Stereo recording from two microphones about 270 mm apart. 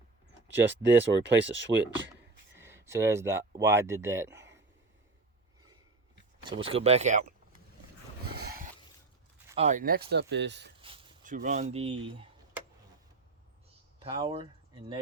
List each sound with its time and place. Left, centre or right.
1.2 s speech: right
2.6 s speech: centre
6.4 s speech: centre
8.4 s a sound: right
9.6 s speech: right
10.8 s a sound: centre
11.2 s speech: right
14.0 s speech: centre